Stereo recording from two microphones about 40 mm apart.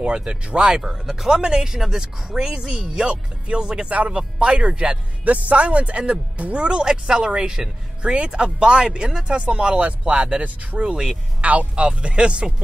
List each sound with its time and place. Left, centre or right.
0.0 s speech: right
0.8 s speech: centre
3.9 s speech: right
4.4 s speech: right
5.2 s speech: right
10.9 s speech: centre
11.4 s speech: right